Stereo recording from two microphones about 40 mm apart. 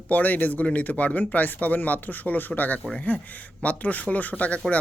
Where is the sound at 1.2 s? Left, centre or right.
Left.